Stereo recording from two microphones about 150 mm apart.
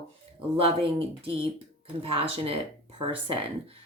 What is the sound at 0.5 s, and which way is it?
Speech, 40° right (ahead or behind).